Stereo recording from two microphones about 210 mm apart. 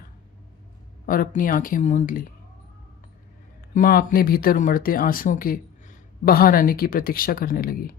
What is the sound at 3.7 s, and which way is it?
Speech, 45° left (ahead or behind).